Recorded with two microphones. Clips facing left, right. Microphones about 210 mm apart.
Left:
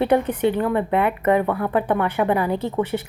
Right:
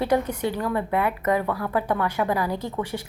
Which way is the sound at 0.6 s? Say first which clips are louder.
Left 4 dB; 25° left (ahead or behind).